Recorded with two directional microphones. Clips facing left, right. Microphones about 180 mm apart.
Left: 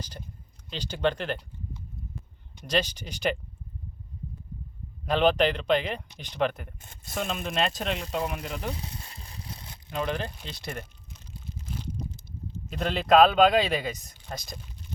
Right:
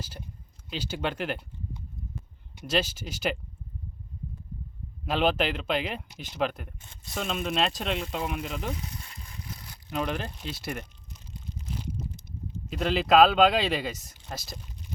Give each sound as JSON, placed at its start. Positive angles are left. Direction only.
{"t": 0.7, "sound": "speech", "side_deg": -5}
{"t": 2.6, "sound": "speech", "side_deg": -5}
{"t": 5.0, "sound": "speech", "side_deg": -5}
{"t": 8.8, "sound": "a sound", "side_deg": 30}
{"t": 9.9, "sound": "speech", "side_deg": -5}
{"t": 12.6, "sound": "speech", "side_deg": 0}